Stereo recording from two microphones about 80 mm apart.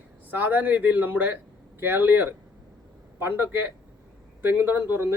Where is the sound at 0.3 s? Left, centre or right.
Right.